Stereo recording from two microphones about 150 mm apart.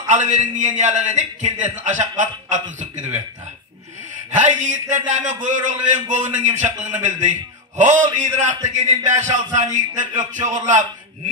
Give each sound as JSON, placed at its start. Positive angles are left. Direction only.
{"t": 0.0, "sound": "a man's voice", "side_deg": -55}
{"t": 4.4, "sound": "a man's voice", "side_deg": -55}